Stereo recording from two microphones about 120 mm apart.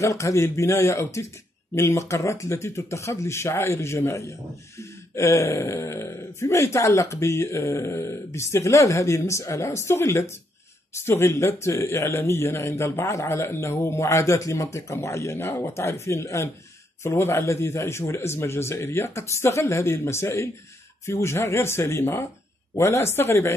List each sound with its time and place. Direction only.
0.0 s speech: 25° left (ahead or behind)